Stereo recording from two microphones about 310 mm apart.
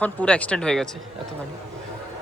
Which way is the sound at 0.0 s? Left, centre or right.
Centre.